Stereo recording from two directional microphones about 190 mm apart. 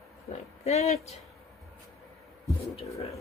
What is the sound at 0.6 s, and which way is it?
Speech, 35° left (ahead or behind).